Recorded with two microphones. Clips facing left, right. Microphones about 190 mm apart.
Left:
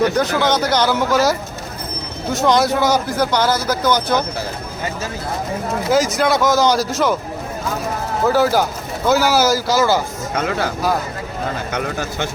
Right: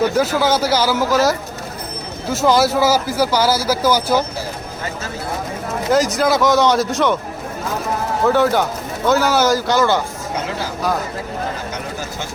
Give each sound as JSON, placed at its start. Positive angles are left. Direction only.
{"t": 0.1, "sound": "a man's voice", "side_deg": -5}
{"t": 5.9, "sound": "a man's voice", "side_deg": 0}
{"t": 8.3, "sound": "a man's voice", "side_deg": 5}
{"t": 11.7, "sound": "speech", "side_deg": 65}